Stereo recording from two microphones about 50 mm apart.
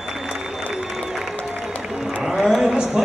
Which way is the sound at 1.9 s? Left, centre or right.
Centre.